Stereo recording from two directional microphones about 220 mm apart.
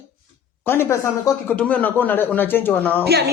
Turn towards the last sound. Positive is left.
turn(degrees=-45)  # may be behind; listen again after turning